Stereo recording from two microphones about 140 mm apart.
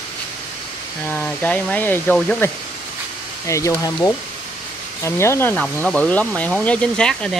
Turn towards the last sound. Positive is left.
turn(degrees=5)  # may be behind; listen again after turning